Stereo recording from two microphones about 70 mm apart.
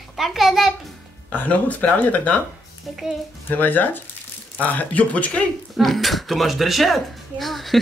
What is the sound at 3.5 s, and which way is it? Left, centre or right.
Speech, left.